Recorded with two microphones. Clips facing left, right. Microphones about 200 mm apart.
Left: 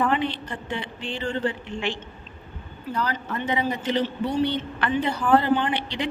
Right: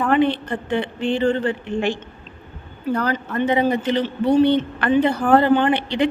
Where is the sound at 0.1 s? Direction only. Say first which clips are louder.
Right 8 dB; 55° right (ahead or behind).